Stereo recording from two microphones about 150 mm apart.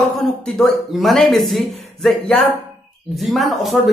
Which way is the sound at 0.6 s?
Centre (ahead or behind).